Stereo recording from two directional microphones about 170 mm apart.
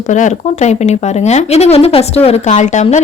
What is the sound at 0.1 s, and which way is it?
A woman's voice, 45° left (ahead or behind).